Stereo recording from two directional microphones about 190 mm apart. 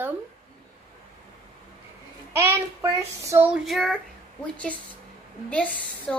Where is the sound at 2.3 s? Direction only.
15° right (ahead or behind).